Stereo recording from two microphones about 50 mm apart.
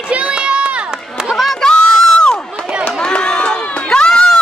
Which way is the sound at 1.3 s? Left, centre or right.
Centre.